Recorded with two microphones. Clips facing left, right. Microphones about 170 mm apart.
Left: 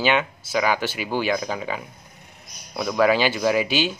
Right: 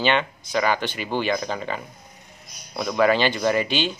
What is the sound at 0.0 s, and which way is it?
Speech, 5° left (ahead or behind).